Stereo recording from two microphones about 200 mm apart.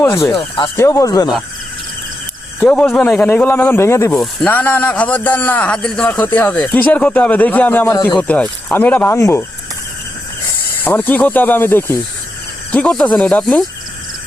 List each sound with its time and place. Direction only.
0.0 s speech: 15° left (ahead or behind)
2.6 s a man's voice: 5° left (ahead or behind)
10.8 s a man's voice: 10° left (ahead or behind)